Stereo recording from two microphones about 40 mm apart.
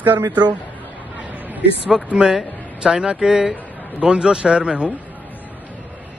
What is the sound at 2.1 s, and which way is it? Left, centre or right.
Speech, centre.